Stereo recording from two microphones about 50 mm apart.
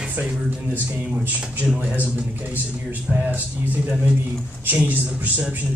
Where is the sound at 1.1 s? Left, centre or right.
Right.